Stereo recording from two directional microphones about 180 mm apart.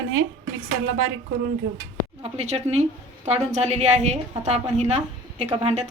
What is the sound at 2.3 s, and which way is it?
A woman's voice, 35° right (ahead or behind).